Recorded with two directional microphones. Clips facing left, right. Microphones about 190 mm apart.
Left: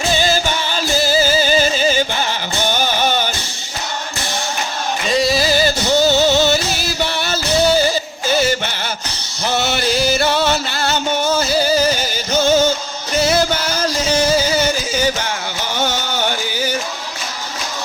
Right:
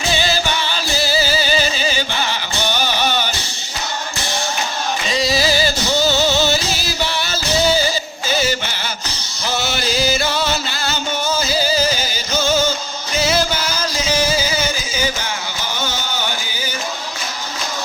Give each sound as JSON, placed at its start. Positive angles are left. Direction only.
{"t": 0.1, "sound": "music", "side_deg": 45}
{"t": 5.1, "sound": "music", "side_deg": 55}
{"t": 15.8, "sound": "a sound", "side_deg": 65}